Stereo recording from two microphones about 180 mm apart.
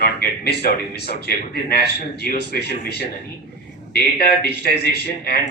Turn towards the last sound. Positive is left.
turn(degrees=60)  # may be behind; listen again after turning